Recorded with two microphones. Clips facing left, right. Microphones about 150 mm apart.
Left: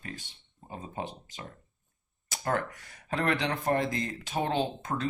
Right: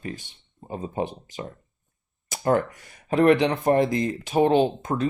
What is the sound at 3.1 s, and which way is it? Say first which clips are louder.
Speech: right 11 dB; 15° right (ahead or behind).